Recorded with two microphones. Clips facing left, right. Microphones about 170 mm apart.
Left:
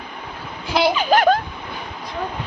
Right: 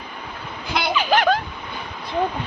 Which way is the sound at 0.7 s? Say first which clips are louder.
Left 4 dB; 40° left (ahead or behind).